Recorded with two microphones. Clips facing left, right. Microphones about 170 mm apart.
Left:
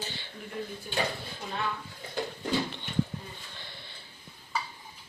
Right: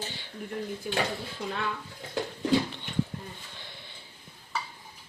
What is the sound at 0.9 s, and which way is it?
Speech, 90° right.